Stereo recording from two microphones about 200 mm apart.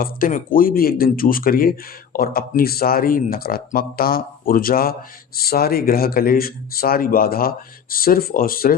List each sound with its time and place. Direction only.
0.0 s speech: 45° left (ahead or behind)